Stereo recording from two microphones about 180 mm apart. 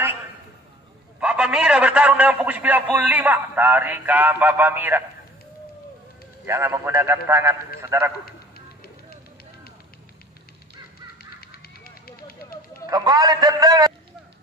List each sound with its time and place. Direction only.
1.2 s a man's voice: 5° right (ahead or behind)
6.4 s a man's voice: 15° right (ahead or behind)
8.3 s music: 55° left (ahead or behind)
11.4 s a sound: 55° left (ahead or behind)
12.9 s a man's voice: 20° right (ahead or behind)